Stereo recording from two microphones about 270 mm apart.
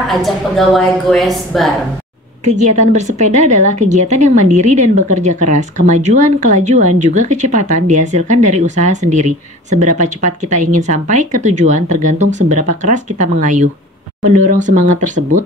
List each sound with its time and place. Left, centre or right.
0.1 s a woman's voice: centre
2.4 s speech: right